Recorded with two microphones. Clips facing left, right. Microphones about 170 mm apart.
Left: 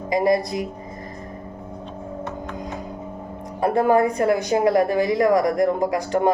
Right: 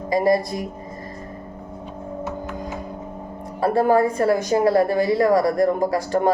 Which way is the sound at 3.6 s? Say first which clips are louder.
Even; 20° left (ahead or behind).